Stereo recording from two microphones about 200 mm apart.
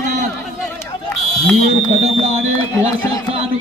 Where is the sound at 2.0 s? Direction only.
35° right (ahead or behind).